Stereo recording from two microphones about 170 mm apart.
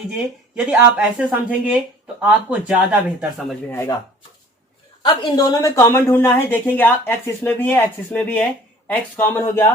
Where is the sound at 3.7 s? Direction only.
15° left (ahead or behind).